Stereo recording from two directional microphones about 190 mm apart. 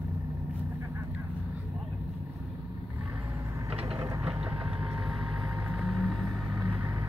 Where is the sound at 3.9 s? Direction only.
10° right (ahead or behind).